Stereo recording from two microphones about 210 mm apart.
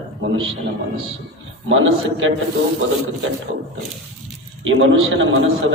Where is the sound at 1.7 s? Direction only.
65° right (ahead or behind).